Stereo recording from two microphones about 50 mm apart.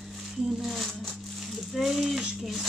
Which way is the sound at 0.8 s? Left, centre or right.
Centre.